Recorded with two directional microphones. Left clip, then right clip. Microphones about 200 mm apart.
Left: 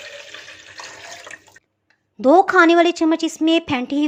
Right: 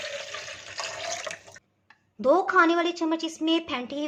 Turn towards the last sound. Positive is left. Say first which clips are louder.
# left 9 dB
turn(degrees=30)  # may be behind; listen again after turning